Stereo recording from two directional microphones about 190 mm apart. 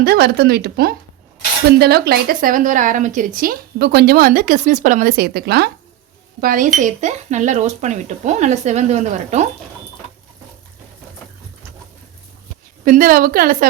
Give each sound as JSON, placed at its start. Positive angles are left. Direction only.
{"t": 0.0, "sound": "a woman's voice", "side_deg": -55}
{"t": 12.8, "sound": "a woman's voice", "side_deg": -45}